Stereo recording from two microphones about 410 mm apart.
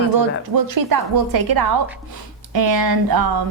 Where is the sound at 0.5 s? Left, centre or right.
Right.